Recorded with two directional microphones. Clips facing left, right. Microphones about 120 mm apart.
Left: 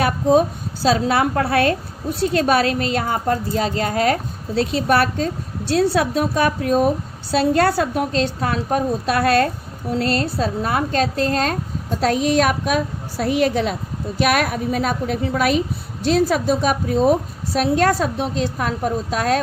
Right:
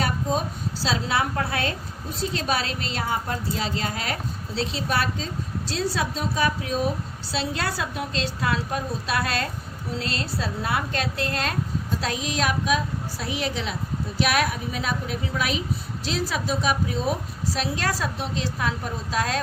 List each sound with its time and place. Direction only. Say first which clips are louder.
0.0 s a woman's voice: left 10 dB; 60° left (ahead or behind); by 11.5 s 40° left (ahead or behind)
11.9 s a woman's voice: left 12 dB; 55° left (ahead or behind)